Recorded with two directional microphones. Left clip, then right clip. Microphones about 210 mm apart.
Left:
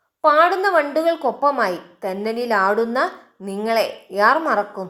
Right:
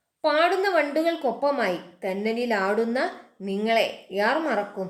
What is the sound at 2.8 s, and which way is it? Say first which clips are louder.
Speech: left 5 dB; 70° left (ahead or behind).